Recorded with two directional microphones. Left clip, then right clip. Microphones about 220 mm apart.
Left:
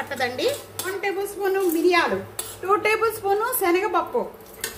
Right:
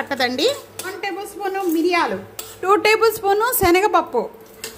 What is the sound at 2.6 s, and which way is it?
A woman's voice, 50° right (ahead or behind).